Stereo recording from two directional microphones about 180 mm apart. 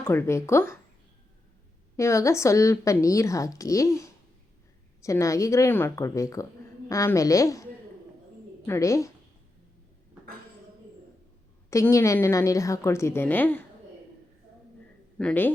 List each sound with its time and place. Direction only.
0.0 s a woman's voice: 15° left (ahead or behind)
2.0 s a woman's voice: 15° left (ahead or behind)
11.7 s a woman's voice: 15° left (ahead or behind)
15.2 s a woman's voice: 10° left (ahead or behind)